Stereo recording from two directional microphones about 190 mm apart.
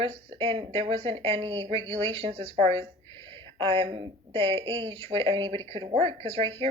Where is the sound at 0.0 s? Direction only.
30° right (ahead or behind).